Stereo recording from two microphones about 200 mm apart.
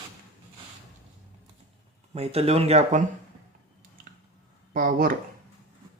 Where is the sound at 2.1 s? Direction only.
30° right (ahead or behind).